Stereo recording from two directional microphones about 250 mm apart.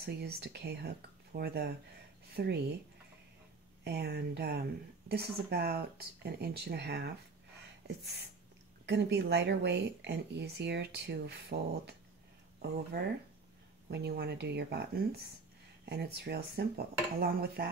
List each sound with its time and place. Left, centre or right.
0.0 s speech: right
3.8 s speech: right
7.8 s a sound: right
8.8 s speech: right
12.9 s speech: right
15.8 s speech: right